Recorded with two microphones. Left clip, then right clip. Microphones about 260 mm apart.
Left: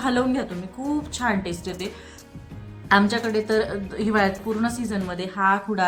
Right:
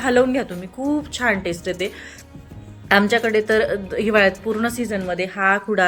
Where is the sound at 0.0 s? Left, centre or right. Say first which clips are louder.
Right 6 dB; centre.